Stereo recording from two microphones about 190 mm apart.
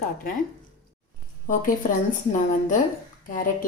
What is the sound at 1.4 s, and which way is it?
Speech, 45° left (ahead or behind).